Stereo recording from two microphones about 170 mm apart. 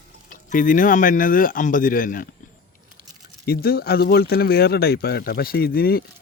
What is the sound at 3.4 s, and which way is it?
Speech, 65° left (ahead or behind).